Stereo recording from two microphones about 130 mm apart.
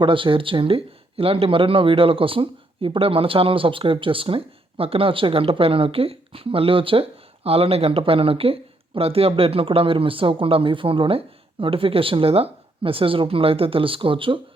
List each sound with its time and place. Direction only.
0.0 s speech: 40° right (ahead or behind)